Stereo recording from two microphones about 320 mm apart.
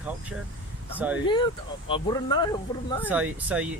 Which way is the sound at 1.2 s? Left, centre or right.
Centre.